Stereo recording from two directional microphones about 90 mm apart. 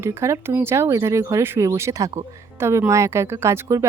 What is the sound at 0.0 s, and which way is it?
Speech, 30° right (ahead or behind).